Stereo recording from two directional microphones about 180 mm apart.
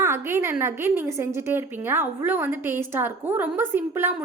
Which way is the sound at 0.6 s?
15° right (ahead or behind).